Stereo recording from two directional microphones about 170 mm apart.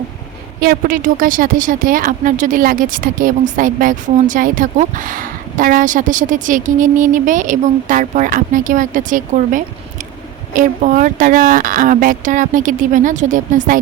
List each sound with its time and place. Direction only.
0.6 s a woman's voice: 60° right (ahead or behind)